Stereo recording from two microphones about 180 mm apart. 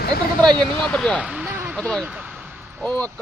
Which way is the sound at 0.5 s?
5° left (ahead or behind).